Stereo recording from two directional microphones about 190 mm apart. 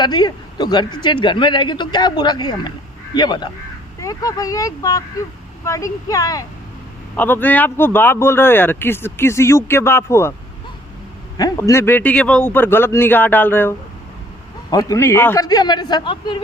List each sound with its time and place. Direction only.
0.0 s speech: 20° left (ahead or behind)
11.3 s speech: 20° left (ahead or behind)